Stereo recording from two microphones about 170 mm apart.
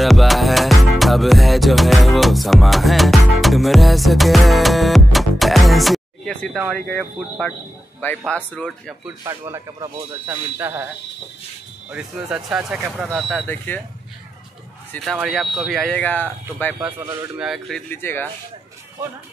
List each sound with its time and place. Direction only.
0.0 s music: centre (ahead or behind)
6.7 s speech: 5° left (ahead or behind)
9.2 s a man's voice: 20° right (ahead or behind)
10.2 s speech: 10° right (ahead or behind)
11.9 s speech: 5° right (ahead or behind)
13.5 s speech: 10° left (ahead or behind)
14.9 s speech: centre (ahead or behind)
17.8 s speech: 15° left (ahead or behind)